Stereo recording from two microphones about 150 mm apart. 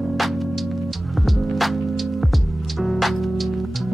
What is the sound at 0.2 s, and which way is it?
Music, centre (ahead or behind).